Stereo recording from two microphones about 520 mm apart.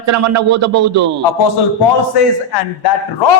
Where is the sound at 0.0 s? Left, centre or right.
Right.